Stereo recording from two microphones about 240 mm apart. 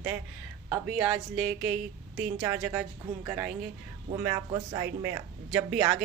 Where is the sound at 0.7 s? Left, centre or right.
Centre.